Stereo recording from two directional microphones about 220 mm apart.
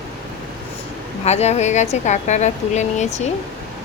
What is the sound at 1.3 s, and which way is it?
Speech, 30° left (ahead or behind).